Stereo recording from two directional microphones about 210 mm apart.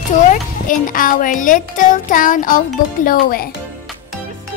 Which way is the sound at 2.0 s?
40° left (ahead or behind).